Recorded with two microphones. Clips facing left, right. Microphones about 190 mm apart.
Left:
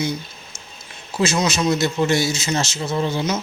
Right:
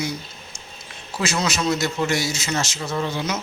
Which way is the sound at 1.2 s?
25° left (ahead or behind).